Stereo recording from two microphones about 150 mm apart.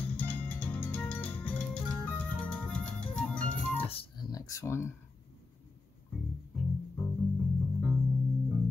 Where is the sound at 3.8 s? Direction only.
40° left (ahead or behind).